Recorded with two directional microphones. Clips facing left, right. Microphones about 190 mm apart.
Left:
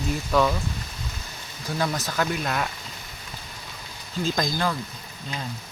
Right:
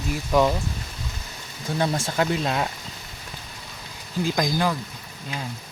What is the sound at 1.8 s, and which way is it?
Speech, 25° right (ahead or behind).